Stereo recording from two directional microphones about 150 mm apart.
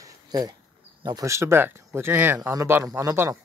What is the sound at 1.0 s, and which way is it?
Speech, 25° right (ahead or behind).